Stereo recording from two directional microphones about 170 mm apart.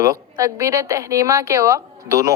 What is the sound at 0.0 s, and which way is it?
A woman's voice, 20° right (ahead or behind).